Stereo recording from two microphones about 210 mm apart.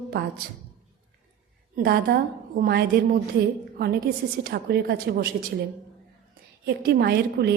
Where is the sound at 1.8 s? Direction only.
45° right (ahead or behind).